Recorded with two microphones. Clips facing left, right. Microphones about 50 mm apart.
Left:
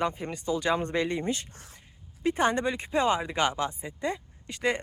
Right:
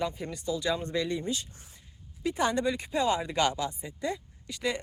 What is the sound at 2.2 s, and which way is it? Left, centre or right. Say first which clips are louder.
Speech: left 2 dB; left.